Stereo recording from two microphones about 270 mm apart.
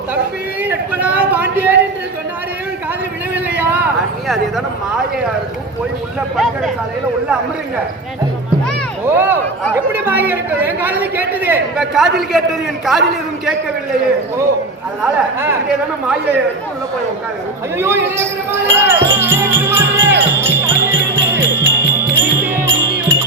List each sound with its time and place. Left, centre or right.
0.6 s a man's voice: centre
3.3 s a sound: centre
6.3 s a man's voice: centre
9.0 s a man's voice: centre
15.0 s speech: centre
17.7 s music: centre